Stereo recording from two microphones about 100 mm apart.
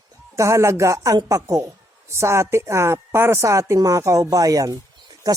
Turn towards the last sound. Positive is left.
turn(degrees=-40)  # may be behind; listen again after turning